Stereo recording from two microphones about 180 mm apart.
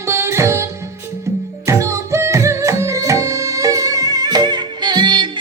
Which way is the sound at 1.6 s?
15° right (ahead or behind).